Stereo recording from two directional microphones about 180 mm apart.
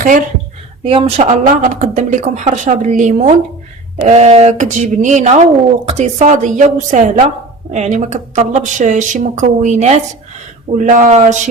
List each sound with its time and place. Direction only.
0.9 s speech: 30° right (ahead or behind)
1.2 s a woman's voice: 45° right (ahead or behind)